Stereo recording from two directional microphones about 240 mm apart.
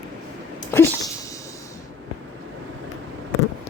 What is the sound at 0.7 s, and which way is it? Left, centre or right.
Speech, centre.